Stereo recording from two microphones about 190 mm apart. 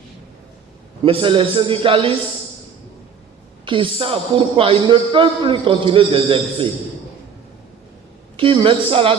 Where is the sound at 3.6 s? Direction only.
25° right (ahead or behind).